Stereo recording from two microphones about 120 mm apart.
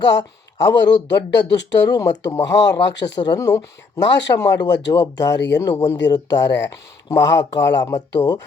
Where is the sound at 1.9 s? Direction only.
30° left (ahead or behind).